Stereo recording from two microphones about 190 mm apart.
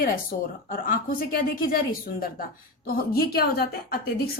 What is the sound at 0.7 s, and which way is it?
A woman's voice, 50° left (ahead or behind).